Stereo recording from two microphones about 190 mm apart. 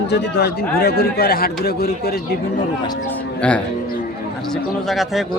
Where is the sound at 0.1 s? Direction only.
55° left (ahead or behind).